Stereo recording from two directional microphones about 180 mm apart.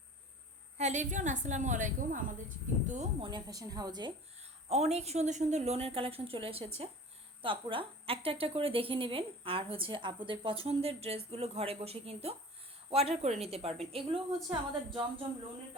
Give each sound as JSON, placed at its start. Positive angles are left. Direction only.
{"t": 0.8, "sound": "a woman's voice", "side_deg": -40}
{"t": 3.2, "sound": "a woman's voice", "side_deg": -25}
{"t": 4.7, "sound": "a woman's voice", "side_deg": -35}